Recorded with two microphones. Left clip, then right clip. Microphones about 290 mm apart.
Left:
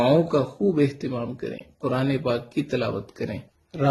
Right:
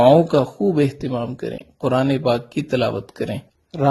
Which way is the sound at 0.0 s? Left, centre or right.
Right.